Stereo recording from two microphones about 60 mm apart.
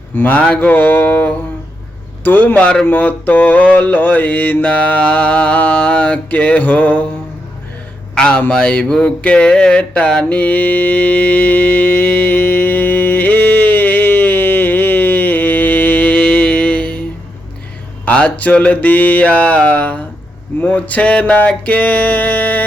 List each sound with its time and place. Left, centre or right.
0.2 s mantra: left
8.1 s speech: centre
10.3 s music: left
18.0 s mantra: left